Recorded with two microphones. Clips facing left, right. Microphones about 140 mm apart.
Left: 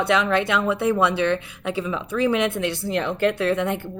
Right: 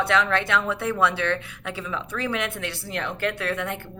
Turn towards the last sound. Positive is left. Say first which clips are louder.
# left 6 dB
turn(degrees=20)  # may be behind; listen again after turning